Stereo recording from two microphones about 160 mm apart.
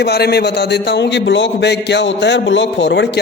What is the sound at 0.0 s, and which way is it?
A man's voice, 90° left.